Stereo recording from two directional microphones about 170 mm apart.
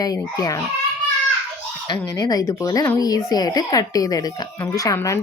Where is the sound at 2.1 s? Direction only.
20° left (ahead or behind).